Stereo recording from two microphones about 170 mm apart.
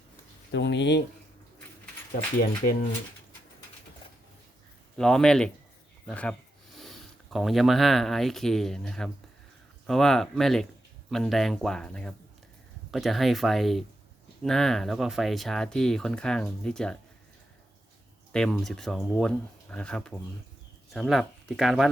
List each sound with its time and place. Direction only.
0.5 s speech: 90° left
4.9 s speech: 5° left (ahead or behind)
7.3 s speech: centre (ahead or behind)
18.3 s speech: 5° left (ahead or behind)